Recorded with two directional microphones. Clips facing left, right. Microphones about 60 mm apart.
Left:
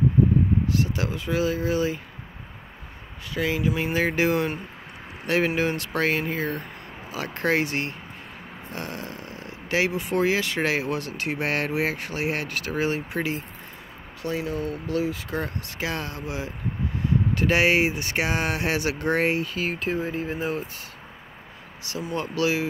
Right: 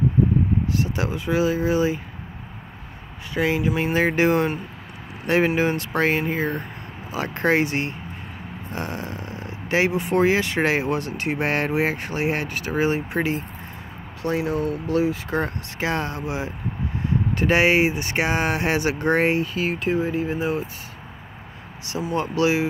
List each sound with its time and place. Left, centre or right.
0.7 s speech: right
3.3 s speech: right
19.5 s speech: centre
22.1 s speech: right